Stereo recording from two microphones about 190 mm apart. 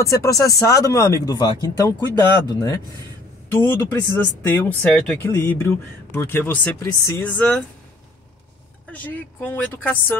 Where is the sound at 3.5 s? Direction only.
10° left (ahead or behind).